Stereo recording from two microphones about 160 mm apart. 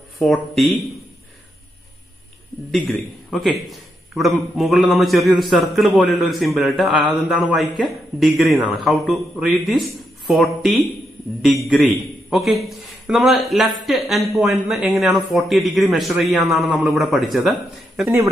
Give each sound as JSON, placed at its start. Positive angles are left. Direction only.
{"t": 0.2, "sound": "a man's voice", "side_deg": 0}
{"t": 3.3, "sound": "a man's voice", "side_deg": 0}
{"t": 18.0, "sound": "speech", "side_deg": -20}